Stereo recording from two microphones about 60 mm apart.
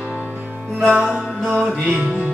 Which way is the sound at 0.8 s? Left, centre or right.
Centre.